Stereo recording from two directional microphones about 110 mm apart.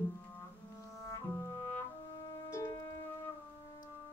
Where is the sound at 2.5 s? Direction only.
25° left (ahead or behind).